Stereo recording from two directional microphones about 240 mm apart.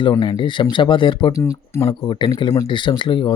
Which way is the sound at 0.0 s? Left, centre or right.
Centre.